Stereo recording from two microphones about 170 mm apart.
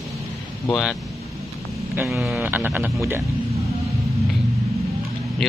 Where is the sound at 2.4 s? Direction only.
10° right (ahead or behind).